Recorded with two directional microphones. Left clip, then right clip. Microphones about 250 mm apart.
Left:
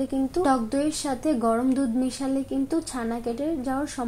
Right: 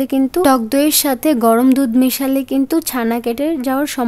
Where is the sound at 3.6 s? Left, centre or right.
Right.